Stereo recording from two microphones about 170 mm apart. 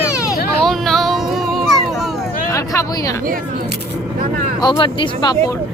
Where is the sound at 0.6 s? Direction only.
Centre (ahead or behind).